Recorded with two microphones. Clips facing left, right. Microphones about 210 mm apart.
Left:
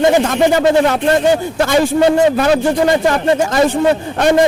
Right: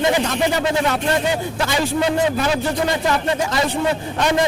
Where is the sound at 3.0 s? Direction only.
45° left (ahead or behind).